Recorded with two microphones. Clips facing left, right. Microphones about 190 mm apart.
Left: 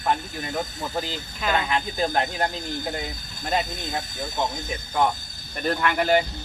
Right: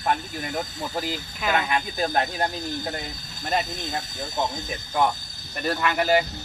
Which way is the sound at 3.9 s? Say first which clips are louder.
Left 1 dB; 25° left (ahead or behind).